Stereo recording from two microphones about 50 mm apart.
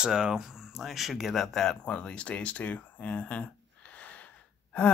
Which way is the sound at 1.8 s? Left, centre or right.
Left.